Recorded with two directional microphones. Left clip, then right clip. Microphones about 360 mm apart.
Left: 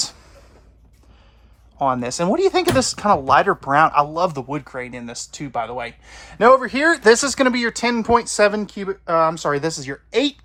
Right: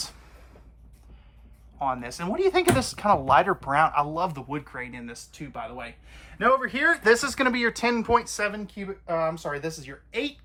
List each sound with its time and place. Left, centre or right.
1.8 s speech: centre
8.6 s speech: left